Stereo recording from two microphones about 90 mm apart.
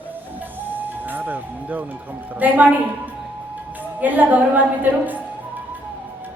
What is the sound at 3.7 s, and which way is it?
Speech, 20° right (ahead or behind).